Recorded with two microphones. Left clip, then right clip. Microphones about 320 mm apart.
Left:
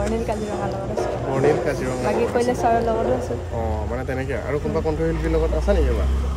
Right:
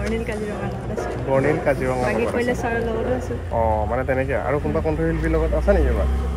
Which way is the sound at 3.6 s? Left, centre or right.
Centre.